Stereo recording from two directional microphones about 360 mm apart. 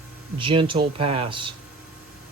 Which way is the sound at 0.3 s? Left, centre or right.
Centre.